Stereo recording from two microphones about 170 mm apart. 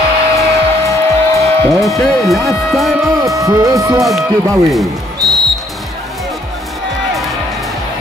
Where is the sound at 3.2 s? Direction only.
20° right (ahead or behind).